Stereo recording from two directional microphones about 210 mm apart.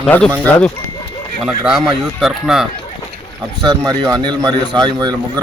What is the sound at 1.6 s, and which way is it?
Speech, 5° right (ahead or behind).